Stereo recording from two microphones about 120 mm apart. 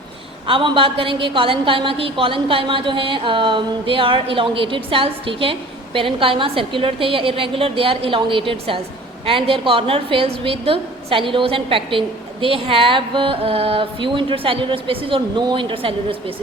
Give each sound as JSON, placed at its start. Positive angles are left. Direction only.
{"t": 0.4, "sound": "a woman's voice", "side_deg": -45}